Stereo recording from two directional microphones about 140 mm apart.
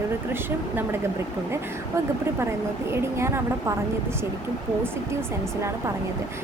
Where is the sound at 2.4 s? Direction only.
15° right (ahead or behind).